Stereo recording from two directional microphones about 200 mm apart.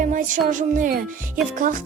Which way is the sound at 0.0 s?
40° right (ahead or behind).